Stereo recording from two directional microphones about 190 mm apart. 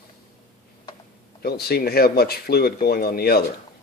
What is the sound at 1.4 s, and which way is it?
Speech, 55° left (ahead or behind).